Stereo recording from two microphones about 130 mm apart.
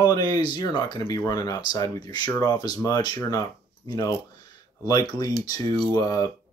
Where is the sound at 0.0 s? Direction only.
30° left (ahead or behind).